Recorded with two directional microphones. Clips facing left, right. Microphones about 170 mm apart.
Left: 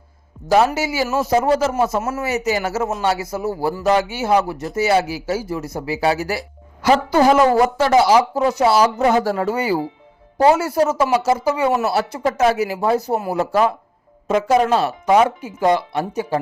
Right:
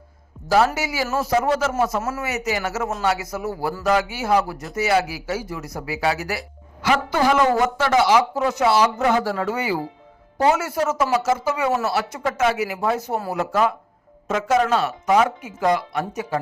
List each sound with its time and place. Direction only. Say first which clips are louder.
0.4 s speech: left 3 dB; 20° left (ahead or behind)
6.8 s speech: left 5 dB; 40° left (ahead or behind)
13.1 s speech: left 4 dB; 20° left (ahead or behind)
13.4 s speech: left 2 dB; 30° left (ahead or behind)